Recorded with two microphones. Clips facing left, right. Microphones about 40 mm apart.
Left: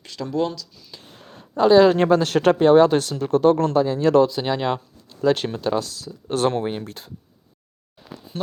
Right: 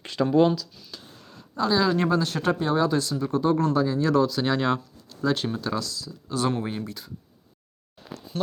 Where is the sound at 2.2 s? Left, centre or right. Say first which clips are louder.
Left 8 dB; left.